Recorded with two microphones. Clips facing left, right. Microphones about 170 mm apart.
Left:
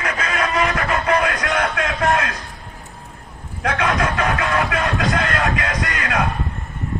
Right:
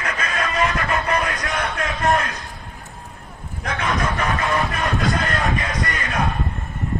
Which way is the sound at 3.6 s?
90° left.